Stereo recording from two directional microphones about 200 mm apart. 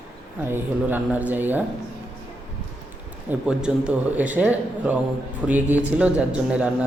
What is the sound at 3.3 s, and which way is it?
A man's voice, 5° right (ahead or behind).